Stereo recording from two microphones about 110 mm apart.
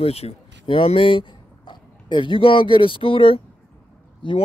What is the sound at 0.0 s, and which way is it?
Speech, 65° left (ahead or behind).